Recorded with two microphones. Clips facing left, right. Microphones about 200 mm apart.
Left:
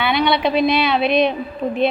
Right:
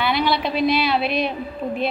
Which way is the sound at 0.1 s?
Centre (ahead or behind).